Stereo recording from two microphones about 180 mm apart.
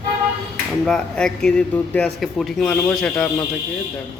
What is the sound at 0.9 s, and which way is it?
Speech, 5° left (ahead or behind).